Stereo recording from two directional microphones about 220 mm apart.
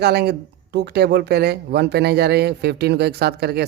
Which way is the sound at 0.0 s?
45° right (ahead or behind).